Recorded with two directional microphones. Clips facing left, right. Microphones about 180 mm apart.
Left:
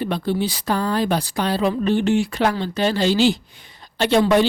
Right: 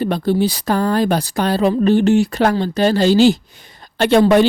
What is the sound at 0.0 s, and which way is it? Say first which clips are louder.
Speech: right 5 dB; 40° right (ahead or behind).